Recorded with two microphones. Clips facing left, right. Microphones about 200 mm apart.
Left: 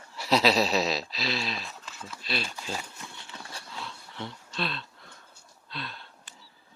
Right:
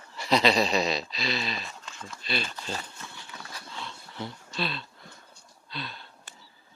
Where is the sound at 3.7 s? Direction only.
Centre (ahead or behind).